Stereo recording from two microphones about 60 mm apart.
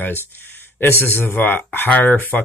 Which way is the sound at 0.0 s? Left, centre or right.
Left.